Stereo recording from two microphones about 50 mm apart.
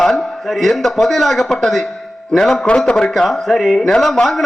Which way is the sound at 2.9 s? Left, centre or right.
Centre.